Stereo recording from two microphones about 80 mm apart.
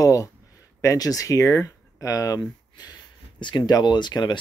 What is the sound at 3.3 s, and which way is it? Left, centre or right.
Speech, left.